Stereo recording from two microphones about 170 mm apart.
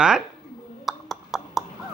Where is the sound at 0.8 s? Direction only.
Centre (ahead or behind).